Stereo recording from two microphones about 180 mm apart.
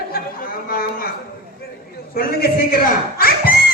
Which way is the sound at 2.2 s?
55° left (ahead or behind).